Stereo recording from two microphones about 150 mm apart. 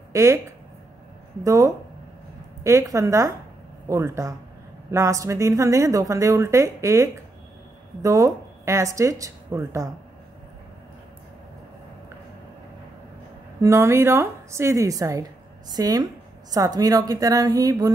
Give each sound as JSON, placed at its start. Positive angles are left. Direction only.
{"t": 0.1, "sound": "speech", "side_deg": -20}
{"t": 13.6, "sound": "a woman's voice", "side_deg": -20}